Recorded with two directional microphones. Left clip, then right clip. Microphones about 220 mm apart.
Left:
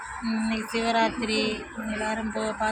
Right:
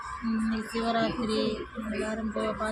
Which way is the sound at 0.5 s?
5° right (ahead or behind).